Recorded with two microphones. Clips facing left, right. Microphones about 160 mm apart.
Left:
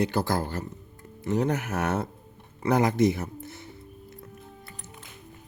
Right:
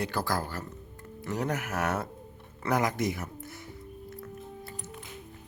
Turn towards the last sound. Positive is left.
turn(degrees=25)  # may be behind; listen again after turning